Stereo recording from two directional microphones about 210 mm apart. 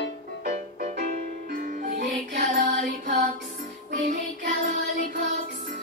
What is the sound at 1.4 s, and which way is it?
Music, 40° right (ahead or behind).